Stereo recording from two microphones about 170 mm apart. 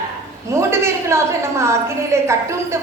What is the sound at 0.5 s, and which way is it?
A woman's voice, 15° right (ahead or behind).